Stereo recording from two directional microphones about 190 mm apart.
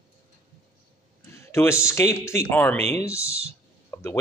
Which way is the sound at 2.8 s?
35° right (ahead or behind).